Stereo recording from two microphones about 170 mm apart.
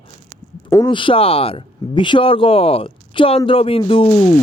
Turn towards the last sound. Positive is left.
turn(degrees=30)  # may be behind; listen again after turning